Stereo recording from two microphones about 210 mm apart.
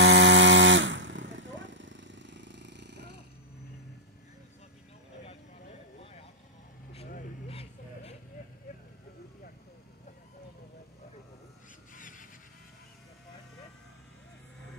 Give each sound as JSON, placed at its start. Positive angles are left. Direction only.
{"t": 0.0, "sound": "chainsaw", "side_deg": -60}
{"t": 7.1, "sound": "vehicle", "side_deg": 30}
{"t": 11.9, "sound": "a sound", "side_deg": 40}